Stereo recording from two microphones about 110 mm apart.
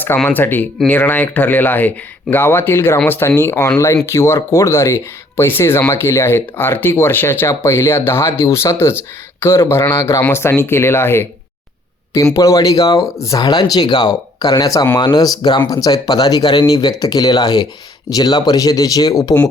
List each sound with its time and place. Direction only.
0.3 s speech: 15° left (ahead or behind); by 19.4 s 35° left (ahead or behind)